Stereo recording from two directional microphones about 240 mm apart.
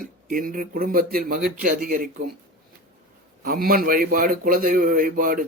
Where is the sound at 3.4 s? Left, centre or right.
Right.